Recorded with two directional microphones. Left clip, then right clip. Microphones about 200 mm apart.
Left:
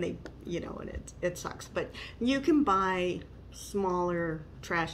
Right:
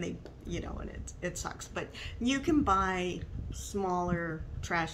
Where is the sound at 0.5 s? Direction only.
20° right (ahead or behind).